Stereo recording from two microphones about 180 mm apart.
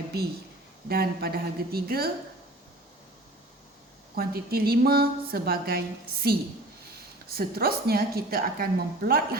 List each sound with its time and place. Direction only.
0.9 s a woman's voice: 60° right (ahead or behind)
4.1 s a woman's voice: 55° right (ahead or behind)